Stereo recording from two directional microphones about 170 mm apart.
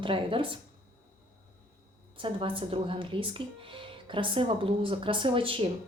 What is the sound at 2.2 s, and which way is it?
A woman's voice, 30° right (ahead or behind).